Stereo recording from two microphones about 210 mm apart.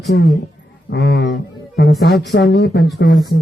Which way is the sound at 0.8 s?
50° left (ahead or behind).